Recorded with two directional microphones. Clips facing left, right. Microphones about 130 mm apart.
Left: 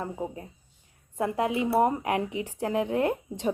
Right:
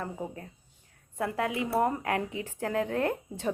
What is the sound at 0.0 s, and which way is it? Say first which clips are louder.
Speech: left 3 dB; 20° left (ahead or behind).